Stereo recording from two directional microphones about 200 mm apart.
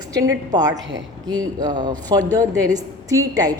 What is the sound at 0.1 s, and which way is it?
A woman's voice, 15° right (ahead or behind).